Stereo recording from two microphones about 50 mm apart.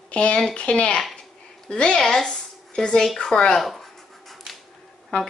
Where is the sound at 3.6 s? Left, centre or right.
Centre.